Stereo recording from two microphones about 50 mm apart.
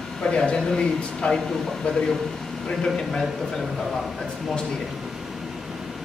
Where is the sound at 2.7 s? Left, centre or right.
Centre.